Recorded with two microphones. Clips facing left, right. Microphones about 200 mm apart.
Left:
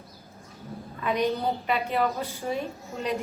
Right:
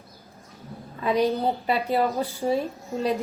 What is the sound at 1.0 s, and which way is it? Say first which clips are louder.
A woman's voice: right 3 dB; 35° right (ahead or behind).